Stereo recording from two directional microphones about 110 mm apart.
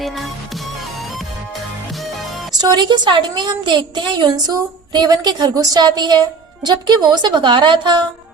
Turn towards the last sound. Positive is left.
turn(degrees=-45)  # may be behind; listen again after turning